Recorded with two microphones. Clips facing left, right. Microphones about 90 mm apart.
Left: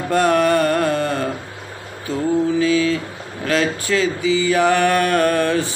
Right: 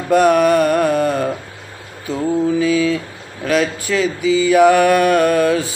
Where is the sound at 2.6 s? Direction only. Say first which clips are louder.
Right 1 dB; 10° right (ahead or behind).